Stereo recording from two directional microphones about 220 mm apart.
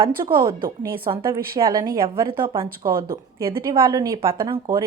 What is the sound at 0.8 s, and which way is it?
Speech, 40° right (ahead or behind).